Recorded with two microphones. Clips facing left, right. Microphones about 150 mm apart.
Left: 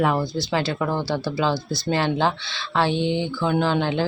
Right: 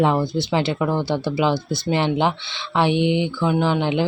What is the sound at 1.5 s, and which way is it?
Speech, 55° right (ahead or behind).